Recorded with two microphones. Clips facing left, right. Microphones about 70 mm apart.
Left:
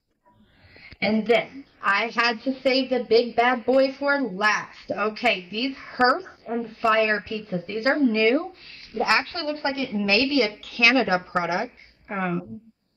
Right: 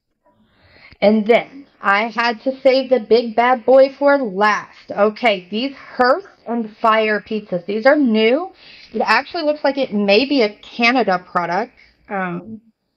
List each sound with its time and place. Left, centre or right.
0.9 s a woman's voice: right